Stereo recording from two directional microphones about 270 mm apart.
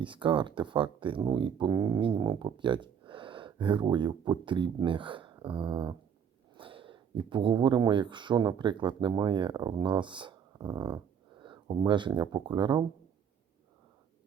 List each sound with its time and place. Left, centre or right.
0.0 s speech: centre